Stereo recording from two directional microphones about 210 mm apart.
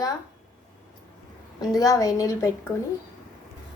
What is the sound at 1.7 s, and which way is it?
Speech, 15° left (ahead or behind).